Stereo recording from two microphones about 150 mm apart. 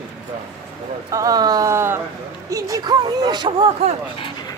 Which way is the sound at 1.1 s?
20° right (ahead or behind).